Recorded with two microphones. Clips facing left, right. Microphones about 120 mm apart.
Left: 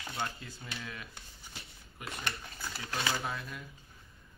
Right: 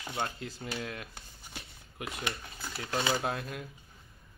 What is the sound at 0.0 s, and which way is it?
Speech, 20° right (ahead or behind).